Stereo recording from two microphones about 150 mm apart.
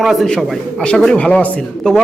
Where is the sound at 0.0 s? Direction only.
Centre (ahead or behind).